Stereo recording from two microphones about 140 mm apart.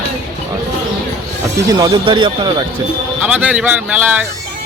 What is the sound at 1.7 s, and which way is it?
Speech, 25° right (ahead or behind).